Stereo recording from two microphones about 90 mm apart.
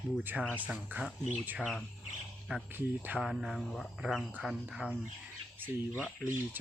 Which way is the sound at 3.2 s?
5° right (ahead or behind).